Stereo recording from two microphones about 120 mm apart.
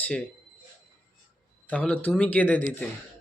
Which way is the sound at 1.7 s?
10° left (ahead or behind).